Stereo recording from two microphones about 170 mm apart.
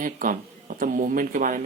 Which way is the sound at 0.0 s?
50° right (ahead or behind).